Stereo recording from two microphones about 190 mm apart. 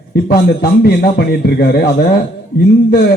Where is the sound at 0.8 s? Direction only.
55° left (ahead or behind).